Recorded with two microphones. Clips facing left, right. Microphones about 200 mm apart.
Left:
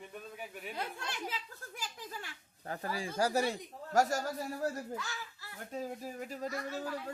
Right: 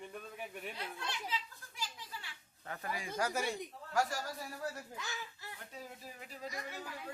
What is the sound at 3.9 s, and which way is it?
Speech, 45° left (ahead or behind).